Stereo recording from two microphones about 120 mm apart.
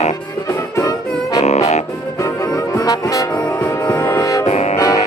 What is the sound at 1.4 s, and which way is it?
Music, 70° left (ahead or behind).